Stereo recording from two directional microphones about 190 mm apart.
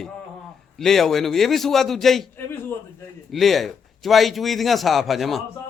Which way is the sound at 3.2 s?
Centre (ahead or behind).